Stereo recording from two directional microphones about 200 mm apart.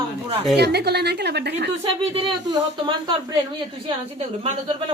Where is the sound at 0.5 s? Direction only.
55° right (ahead or behind).